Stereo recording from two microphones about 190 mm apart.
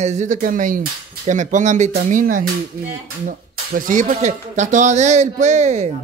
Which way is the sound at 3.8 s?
45° right (ahead or behind).